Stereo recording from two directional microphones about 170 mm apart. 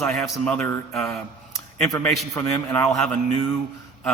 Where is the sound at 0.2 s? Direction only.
10° left (ahead or behind).